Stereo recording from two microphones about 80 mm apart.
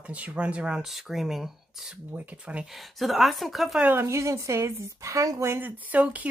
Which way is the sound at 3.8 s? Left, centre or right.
Right.